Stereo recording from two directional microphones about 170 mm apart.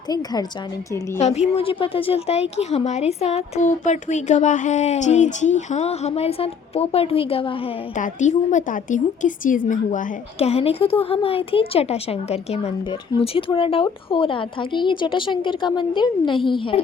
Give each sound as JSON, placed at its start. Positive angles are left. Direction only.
{"t": 0.1, "sound": "a woman's voice", "side_deg": 25}
{"t": 1.2, "sound": "a woman's voice", "side_deg": 40}
{"t": 7.9, "sound": "a woman's voice", "side_deg": 45}
{"t": 10.3, "sound": "a woman's voice", "side_deg": 35}